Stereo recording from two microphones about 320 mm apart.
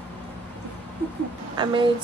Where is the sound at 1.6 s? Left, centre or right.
Centre.